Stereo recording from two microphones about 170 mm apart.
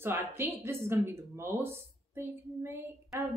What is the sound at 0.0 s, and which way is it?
Speech, 15° right (ahead or behind).